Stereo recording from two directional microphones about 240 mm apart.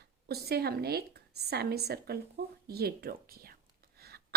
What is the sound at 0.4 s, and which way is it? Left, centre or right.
A woman's voice, right.